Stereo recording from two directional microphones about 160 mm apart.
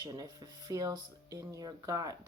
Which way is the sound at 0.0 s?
25° right (ahead or behind).